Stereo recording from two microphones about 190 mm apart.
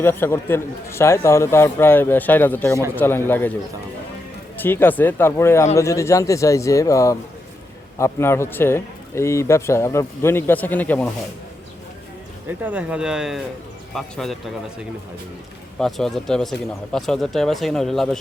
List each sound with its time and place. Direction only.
0.0 s a man's voice: 10° left (ahead or behind)
4.5 s a man's voice: 10° left (ahead or behind)
12.5 s speech: 10° right (ahead or behind)